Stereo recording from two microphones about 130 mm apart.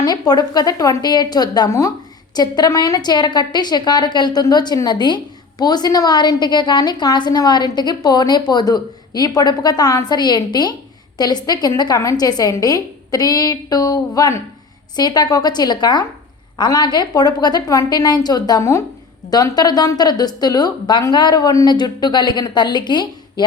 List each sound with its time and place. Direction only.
0.0 s a woman's voice: 30° left (ahead or behind)